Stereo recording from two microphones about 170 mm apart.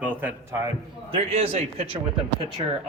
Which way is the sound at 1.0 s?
35° right (ahead or behind).